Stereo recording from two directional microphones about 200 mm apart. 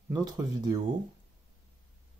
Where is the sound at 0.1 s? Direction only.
20° right (ahead or behind).